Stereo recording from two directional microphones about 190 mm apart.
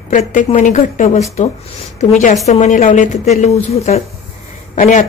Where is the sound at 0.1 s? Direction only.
40° left (ahead or behind).